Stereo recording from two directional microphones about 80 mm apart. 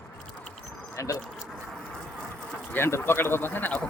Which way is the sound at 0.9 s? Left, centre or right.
Left.